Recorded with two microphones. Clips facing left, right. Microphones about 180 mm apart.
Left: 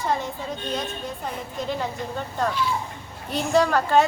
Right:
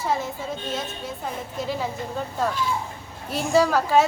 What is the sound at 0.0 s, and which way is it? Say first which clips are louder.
A woman's voice: even; 5° right (ahead or behind).